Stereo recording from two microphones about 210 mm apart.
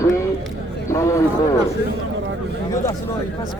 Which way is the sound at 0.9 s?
15° left (ahead or behind).